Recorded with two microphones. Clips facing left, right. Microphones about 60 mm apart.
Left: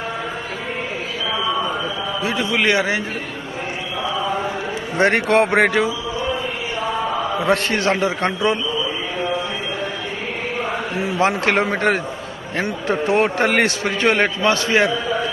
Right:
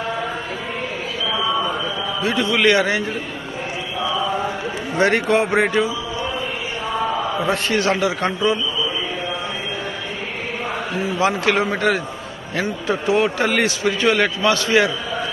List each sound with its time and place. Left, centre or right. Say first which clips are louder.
1.3 s a sound: even; centre
2.2 s a man's voice: right 2 dB; centre
4.9 s speech: left 1 dB; left
7.4 s a man's voice: left 2 dB; left
11.2 s a man's voice: left 1 dB; left
14.2 s a man's voice: even; left